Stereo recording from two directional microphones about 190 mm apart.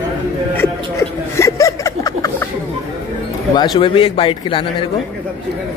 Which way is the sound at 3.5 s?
25° left (ahead or behind).